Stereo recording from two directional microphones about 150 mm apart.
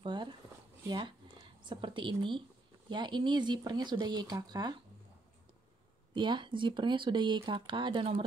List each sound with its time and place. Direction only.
0.0 s zipper: 30° right (ahead or behind)
0.8 s speech: 30° right (ahead or behind)
6.1 s speech: 30° right (ahead or behind)